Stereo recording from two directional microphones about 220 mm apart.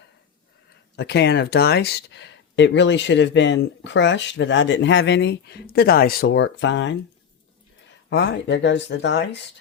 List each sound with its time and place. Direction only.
0.9 s speech: 50° left (ahead or behind)